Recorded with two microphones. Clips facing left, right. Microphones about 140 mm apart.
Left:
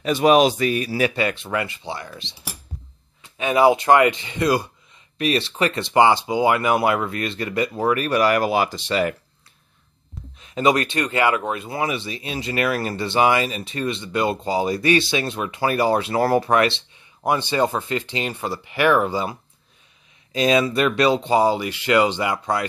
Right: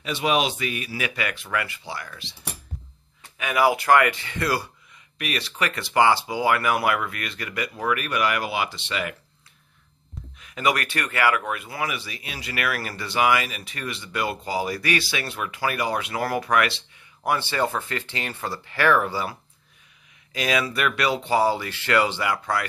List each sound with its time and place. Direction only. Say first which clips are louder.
0.0 s speech: left 8 dB; 45° left (ahead or behind); by 2.3 s 25° left (ahead or behind)
3.3 s speech: left 5 dB; 25° left (ahead or behind)
10.4 s speech: left 5 dB; 25° left (ahead or behind)
20.3 s speech: left 7 dB; 25° left (ahead or behind)